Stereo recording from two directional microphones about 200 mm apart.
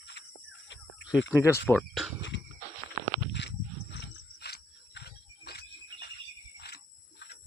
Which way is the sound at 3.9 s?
55° left (ahead or behind).